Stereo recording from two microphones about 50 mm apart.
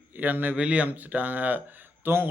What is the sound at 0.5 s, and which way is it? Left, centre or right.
A man's voice, right.